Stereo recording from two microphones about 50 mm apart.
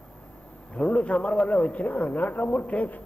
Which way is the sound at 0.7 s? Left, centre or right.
Left.